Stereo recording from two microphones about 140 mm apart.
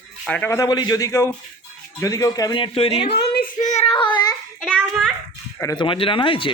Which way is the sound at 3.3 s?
75° left (ahead or behind).